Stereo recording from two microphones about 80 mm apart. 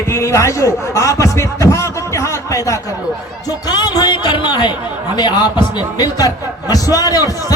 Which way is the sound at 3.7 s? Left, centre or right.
Left.